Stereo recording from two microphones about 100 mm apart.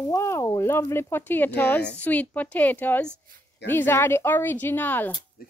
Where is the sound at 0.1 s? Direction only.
30° left (ahead or behind).